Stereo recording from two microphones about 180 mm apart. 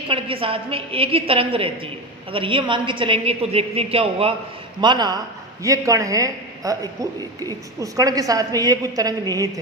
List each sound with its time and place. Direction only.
0.1 s a woman's voice: 30° right (ahead or behind)